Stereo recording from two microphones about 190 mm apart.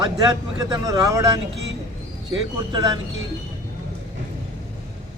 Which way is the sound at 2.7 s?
20° right (ahead or behind).